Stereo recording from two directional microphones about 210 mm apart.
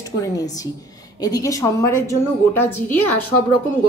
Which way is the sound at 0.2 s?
15° left (ahead or behind).